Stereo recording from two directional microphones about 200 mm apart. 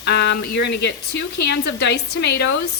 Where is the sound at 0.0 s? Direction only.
55° left (ahead or behind).